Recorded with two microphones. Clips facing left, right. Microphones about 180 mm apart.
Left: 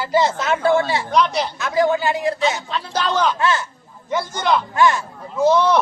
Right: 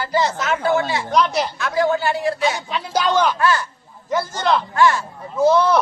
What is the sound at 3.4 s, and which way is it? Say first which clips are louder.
Speech: right 1 dB; 25° left (ahead or behind).